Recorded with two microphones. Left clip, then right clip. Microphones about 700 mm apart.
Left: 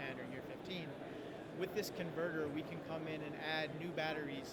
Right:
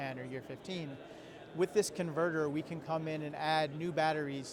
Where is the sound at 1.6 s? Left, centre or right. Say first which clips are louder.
Right 10 dB; right.